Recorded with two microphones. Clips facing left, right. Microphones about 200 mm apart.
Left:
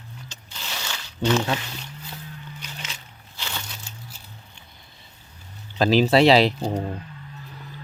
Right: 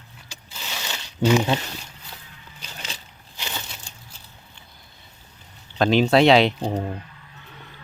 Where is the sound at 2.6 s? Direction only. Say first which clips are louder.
Right 5 dB; 30° right (ahead or behind).